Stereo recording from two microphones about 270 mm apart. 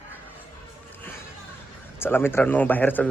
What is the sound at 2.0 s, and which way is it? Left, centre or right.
Speech, centre.